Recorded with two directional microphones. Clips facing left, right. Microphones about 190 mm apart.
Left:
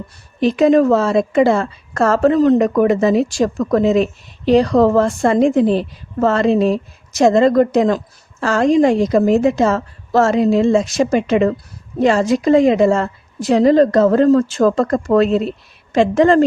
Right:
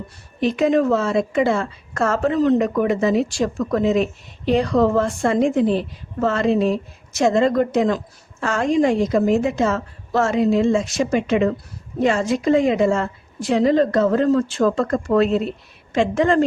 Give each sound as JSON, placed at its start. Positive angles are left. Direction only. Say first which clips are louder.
{"t": 0.3, "sound": "a woman's voice", "louder": "left 5 dB", "side_deg": 35}